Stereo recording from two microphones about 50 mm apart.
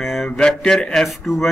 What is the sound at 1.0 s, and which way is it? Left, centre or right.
Speech, centre.